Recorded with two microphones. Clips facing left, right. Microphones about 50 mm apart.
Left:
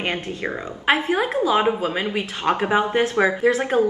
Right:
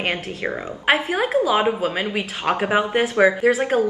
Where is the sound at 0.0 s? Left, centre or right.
Centre.